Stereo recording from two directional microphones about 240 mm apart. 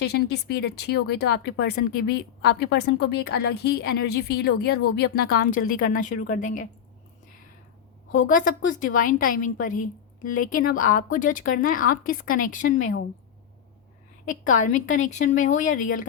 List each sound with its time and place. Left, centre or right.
0.0 s a woman's voice: left
8.1 s a woman's voice: left
12.8 s speech: left
14.6 s a woman's voice: left